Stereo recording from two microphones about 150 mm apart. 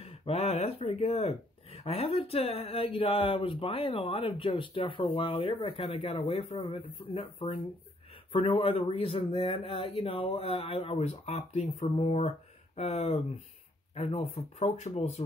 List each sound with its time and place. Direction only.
0.0 s speech: 40° left (ahead or behind)